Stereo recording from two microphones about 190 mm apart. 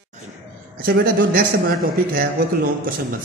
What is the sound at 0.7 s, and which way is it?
A man's voice, 50° right (ahead or behind).